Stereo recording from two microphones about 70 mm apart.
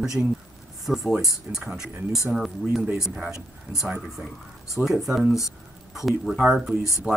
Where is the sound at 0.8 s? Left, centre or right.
Centre.